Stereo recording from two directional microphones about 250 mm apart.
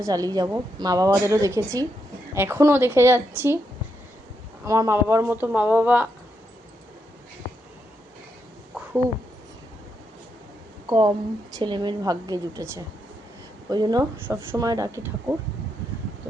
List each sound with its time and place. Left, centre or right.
0.0 s a woman's voice: centre
4.6 s a woman's voice: centre
10.8 s a woman's voice: centre